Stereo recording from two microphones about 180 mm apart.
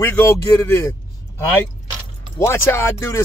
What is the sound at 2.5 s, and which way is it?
Speech, 15° left (ahead or behind).